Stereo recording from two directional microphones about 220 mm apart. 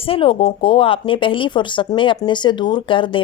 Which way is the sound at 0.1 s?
25° left (ahead or behind).